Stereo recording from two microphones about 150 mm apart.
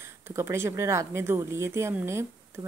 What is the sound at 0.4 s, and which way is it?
Speech, 15° right (ahead or behind).